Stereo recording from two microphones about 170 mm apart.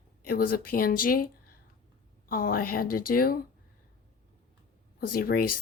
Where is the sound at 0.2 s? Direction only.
60° left (ahead or behind).